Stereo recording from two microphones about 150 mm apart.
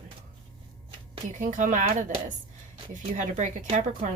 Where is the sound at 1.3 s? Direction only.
60° right (ahead or behind).